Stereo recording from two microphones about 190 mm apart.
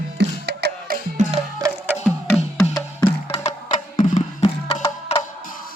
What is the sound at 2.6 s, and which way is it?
Music, 15° left (ahead or behind).